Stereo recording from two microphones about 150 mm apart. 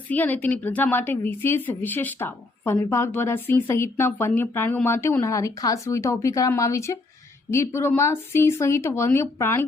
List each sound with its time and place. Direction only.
0.1 s a woman's voice: 10° left (ahead or behind)